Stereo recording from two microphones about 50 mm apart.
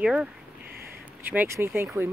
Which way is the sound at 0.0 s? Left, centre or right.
Centre.